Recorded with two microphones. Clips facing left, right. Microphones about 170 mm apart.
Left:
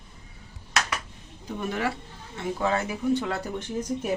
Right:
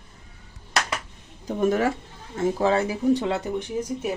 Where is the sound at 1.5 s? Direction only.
45° right (ahead or behind).